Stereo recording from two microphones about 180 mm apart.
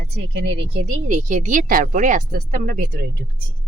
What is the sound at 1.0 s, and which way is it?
Speech, 45° right (ahead or behind).